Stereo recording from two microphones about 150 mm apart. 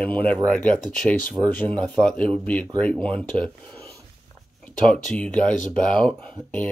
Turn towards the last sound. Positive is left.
turn(degrees=10)  # may be behind; listen again after turning